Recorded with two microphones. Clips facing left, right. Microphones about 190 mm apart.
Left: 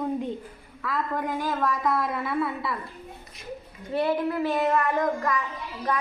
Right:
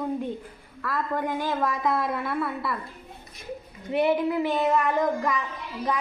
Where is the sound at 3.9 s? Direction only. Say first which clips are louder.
Right 2 dB; 20° right (ahead or behind).